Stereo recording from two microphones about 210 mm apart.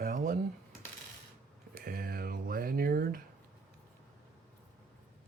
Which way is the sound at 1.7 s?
45° right (ahead or behind).